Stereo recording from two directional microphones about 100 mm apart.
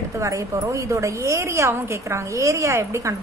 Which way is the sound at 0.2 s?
30° right (ahead or behind).